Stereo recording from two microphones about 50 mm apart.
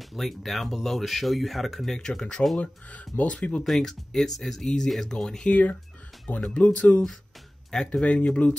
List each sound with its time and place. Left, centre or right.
0.0 s speech: centre
2.0 s speech: centre
2.6 s speech: left
3.6 s speech: centre
5.5 s speech: left
6.2 s speech: centre
6.7 s speech: left
7.7 s speech: centre